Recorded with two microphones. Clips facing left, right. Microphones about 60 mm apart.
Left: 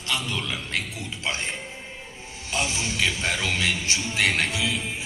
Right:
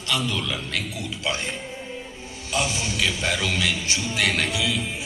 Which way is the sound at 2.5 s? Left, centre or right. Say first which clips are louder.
Right 2 dB; left.